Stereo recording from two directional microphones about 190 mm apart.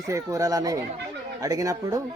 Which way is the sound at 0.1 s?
15° right (ahead or behind).